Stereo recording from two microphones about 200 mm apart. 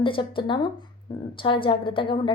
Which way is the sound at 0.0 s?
25° left (ahead or behind).